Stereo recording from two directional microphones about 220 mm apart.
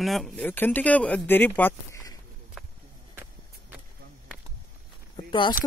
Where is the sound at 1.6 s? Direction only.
10° left (ahead or behind).